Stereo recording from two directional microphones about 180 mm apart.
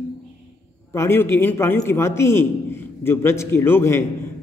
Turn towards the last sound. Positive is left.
turn(degrees=15)  # may be behind; listen again after turning